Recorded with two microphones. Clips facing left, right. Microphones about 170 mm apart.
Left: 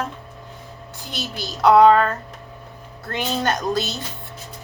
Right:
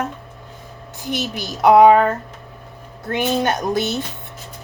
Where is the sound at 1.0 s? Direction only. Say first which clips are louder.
Right 6 dB; 20° right (ahead or behind).